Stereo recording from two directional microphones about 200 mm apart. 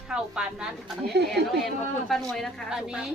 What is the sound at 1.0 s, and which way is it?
Speech, 55° right (ahead or behind).